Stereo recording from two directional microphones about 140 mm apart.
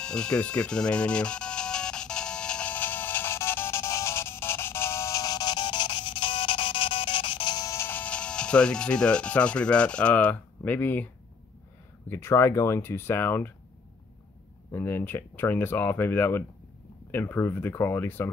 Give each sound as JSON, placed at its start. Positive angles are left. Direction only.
{"t": 0.0, "sound": "music", "side_deg": 5}
{"t": 12.1, "sound": "speech", "side_deg": 15}
{"t": 14.7, "sound": "speech", "side_deg": 15}